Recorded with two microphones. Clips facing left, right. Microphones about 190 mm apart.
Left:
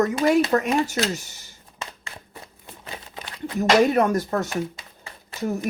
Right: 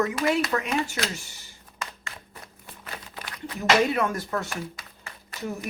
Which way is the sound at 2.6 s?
20° left (ahead or behind).